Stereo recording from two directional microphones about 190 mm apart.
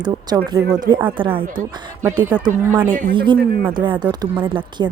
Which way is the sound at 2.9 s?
45° right (ahead or behind).